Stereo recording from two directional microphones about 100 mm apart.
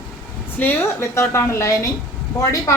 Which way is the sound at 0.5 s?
20° left (ahead or behind).